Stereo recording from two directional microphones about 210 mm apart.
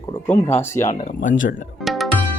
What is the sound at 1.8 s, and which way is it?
Music, centre (ahead or behind).